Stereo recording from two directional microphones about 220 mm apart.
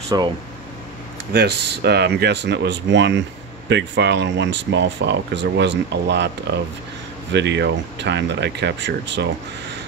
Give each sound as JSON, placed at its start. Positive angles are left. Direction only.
{"t": 0.1, "sound": "speech", "side_deg": -15}
{"t": 1.3, "sound": "speech", "side_deg": -50}